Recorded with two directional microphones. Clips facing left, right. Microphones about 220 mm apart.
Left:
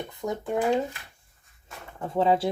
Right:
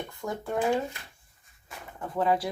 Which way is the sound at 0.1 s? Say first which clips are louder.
Left 5 dB; 20° left (ahead or behind).